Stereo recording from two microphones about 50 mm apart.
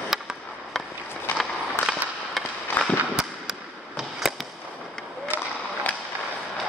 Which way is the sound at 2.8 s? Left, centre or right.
Left.